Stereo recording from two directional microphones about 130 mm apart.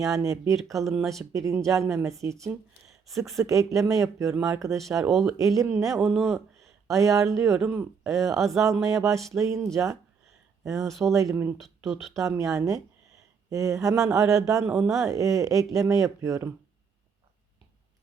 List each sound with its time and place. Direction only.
0.0 s speech: 25° right (ahead or behind)
5.0 s speech: centre (ahead or behind)
5.5 s speech: 20° right (ahead or behind)
6.1 s speech: 5° left (ahead or behind)
6.9 s speech: 25° right (ahead or behind)
11.6 s speech: centre (ahead or behind)
12.1 s speech: 25° right (ahead or behind)